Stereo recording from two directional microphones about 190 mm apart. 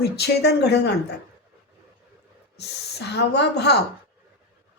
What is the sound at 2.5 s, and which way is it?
A man's voice, 60° left (ahead or behind).